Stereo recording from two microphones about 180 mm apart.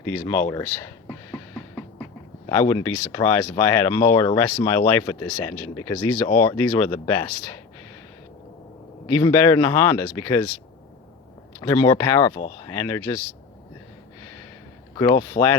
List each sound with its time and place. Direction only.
0.0 s a sound: 15° left (ahead or behind)
2.5 s speech: 20° left (ahead or behind)
9.0 s speech: 15° left (ahead or behind)
11.6 s speech: 15° left (ahead or behind)
14.9 s speech: 20° left (ahead or behind)